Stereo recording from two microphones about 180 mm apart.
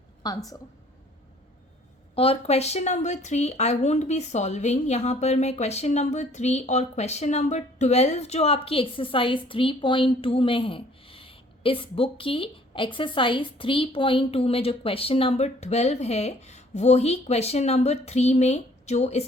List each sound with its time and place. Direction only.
0.2 s a woman's voice: 20° left (ahead or behind)
2.1 s speech: 35° left (ahead or behind)